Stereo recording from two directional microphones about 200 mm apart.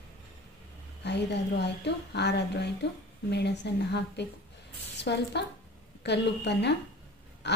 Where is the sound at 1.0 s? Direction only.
60° left (ahead or behind).